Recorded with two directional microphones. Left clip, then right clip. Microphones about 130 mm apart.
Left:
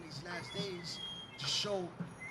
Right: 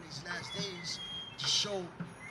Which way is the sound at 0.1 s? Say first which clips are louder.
Right 4 dB; 10° right (ahead or behind).